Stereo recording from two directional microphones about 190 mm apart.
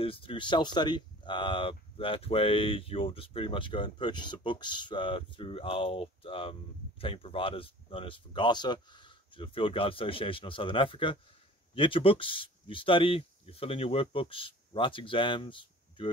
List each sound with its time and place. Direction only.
0.0 s speech: 30° left (ahead or behind)